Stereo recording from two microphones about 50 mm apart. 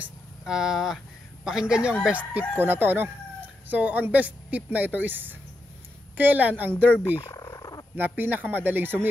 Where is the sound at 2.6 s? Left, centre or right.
Right.